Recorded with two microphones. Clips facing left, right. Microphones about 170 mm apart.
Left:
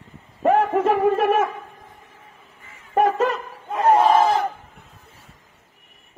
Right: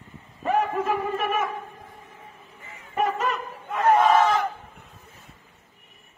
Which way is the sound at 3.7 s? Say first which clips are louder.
Left 3 dB; 35° left (ahead or behind).